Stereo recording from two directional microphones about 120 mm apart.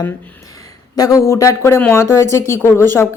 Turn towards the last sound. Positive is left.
turn(degrees=20)  # may be behind; listen again after turning